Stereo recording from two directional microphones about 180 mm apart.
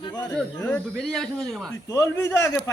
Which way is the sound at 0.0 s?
20° left (ahead or behind).